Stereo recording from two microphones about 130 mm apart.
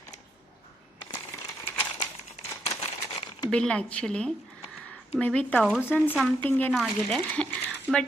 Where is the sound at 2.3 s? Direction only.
50° left (ahead or behind).